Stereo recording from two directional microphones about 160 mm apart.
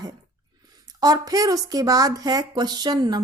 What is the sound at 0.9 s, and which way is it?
Speech, 25° right (ahead or behind).